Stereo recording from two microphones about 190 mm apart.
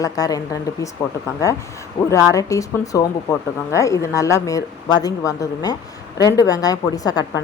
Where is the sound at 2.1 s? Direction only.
15° left (ahead or behind).